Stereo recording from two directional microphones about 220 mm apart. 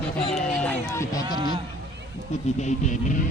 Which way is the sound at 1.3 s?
20° right (ahead or behind).